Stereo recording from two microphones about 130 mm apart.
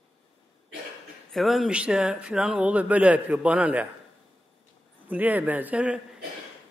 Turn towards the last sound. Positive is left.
turn(degrees=-10)  # may be behind; listen again after turning